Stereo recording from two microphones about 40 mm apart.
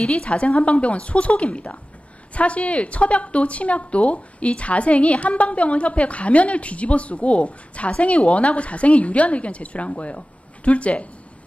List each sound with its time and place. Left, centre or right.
0.0 s a woman's voice: left